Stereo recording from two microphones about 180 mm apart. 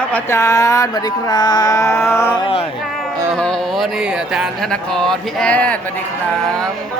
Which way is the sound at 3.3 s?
Centre (ahead or behind).